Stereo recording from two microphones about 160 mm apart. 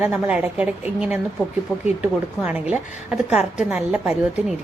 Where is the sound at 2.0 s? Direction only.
10° right (ahead or behind).